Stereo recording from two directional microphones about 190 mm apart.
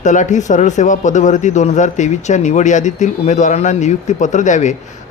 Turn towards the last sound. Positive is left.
turn(degrees=40)  # may be behind; listen again after turning